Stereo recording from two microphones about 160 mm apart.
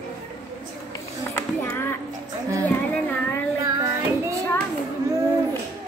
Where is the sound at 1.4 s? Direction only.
15° left (ahead or behind).